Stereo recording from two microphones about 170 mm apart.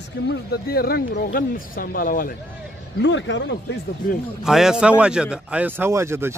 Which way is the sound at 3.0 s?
90° left.